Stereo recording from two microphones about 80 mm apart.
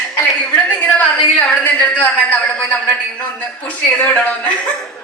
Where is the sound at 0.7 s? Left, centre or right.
Centre.